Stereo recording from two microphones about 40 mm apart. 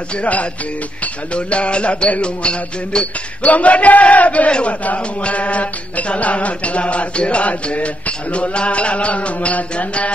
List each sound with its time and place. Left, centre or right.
0.2 s music: left
3.5 s music: left
4.5 s music: left